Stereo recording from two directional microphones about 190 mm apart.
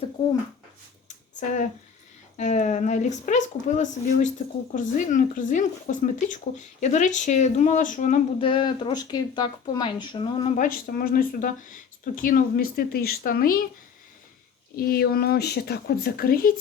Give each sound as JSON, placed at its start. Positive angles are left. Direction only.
{"t": 1.0, "sound": "a sound", "side_deg": 40}
{"t": 2.4, "sound": "speech", "side_deg": 40}
{"t": 8.4, "sound": "speech", "side_deg": 25}
{"t": 10.6, "sound": "speech", "side_deg": 50}
{"t": 14.8, "sound": "speech", "side_deg": 55}